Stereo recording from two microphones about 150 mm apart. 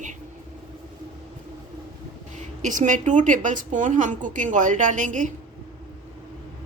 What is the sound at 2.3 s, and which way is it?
A woman's voice, 55° right (ahead or behind).